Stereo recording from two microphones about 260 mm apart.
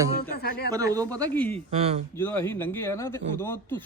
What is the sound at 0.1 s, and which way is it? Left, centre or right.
Speech, left.